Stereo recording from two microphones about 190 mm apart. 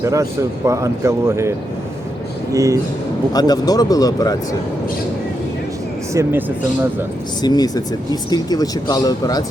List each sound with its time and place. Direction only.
0.0 s a man's voice: 15° right (ahead or behind)
3.3 s speech: 20° left (ahead or behind)
6.2 s a man's voice: 15° right (ahead or behind)
7.4 s speech: 20° left (ahead or behind)